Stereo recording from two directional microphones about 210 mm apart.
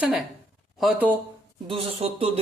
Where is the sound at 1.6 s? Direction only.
25° right (ahead or behind).